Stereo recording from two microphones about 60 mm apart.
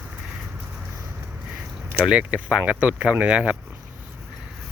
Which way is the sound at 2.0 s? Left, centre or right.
Centre.